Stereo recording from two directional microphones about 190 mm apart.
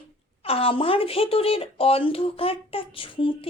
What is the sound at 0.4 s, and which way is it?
A woman's voice, 30° left (ahead or behind).